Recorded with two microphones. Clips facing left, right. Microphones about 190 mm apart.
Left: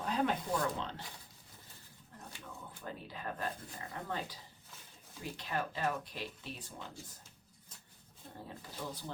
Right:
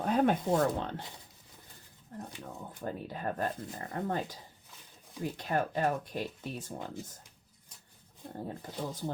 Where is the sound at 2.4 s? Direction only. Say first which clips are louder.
Right 5 dB; 45° right (ahead or behind).